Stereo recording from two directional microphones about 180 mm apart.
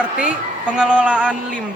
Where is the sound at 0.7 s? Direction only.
5° right (ahead or behind).